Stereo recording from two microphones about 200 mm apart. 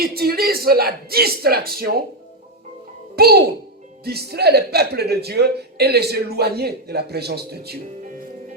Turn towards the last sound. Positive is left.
turn(degrees=-55)  # may be behind; listen again after turning